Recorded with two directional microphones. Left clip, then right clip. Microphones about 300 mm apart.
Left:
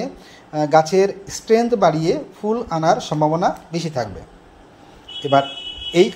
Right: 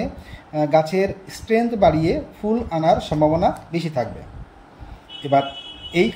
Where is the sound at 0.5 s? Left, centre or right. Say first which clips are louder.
Left 3 dB; centre.